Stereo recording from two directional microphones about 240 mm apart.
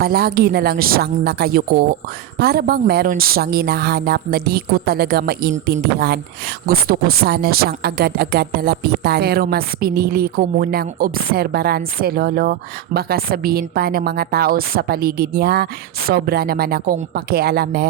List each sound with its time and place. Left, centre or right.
0.0 s speech: right
6.7 s speech: right